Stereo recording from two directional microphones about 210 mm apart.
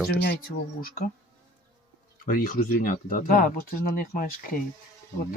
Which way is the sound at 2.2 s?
40° left (ahead or behind).